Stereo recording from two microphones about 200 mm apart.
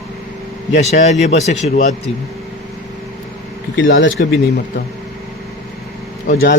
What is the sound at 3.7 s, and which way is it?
Speech, 70° left (ahead or behind).